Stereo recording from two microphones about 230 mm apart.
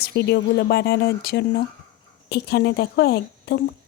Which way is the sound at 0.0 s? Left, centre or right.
Left.